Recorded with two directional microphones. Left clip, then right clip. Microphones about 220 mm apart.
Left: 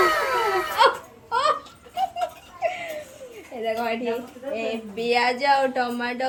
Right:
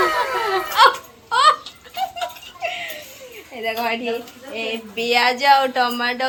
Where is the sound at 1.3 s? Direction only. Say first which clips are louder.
Right 7 dB; 5° right (ahead or behind).